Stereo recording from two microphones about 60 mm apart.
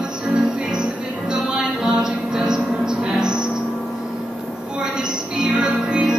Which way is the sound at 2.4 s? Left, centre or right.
Centre.